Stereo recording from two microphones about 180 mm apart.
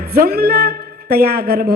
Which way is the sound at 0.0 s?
60° right (ahead or behind).